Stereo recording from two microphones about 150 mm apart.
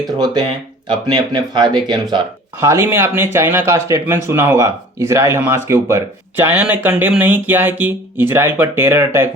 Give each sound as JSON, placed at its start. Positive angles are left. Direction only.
{"t": 0.9, "sound": "speech", "side_deg": -30}